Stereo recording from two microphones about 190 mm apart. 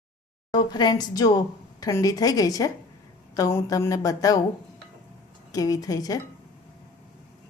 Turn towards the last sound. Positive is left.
turn(degrees=20)  # may be behind; listen again after turning